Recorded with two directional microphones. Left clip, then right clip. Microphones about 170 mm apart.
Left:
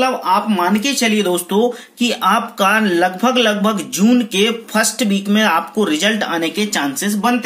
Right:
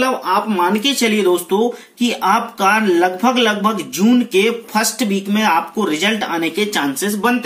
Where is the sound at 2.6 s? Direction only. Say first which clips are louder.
Even; 40° left (ahead or behind).